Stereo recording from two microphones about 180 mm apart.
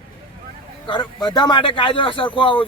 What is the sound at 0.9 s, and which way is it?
Speech, 25° left (ahead or behind).